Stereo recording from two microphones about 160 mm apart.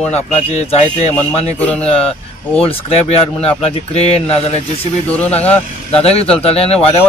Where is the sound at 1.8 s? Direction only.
40° left (ahead or behind).